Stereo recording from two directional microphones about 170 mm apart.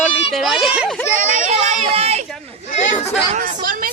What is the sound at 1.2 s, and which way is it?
Speech, 45° right (ahead or behind).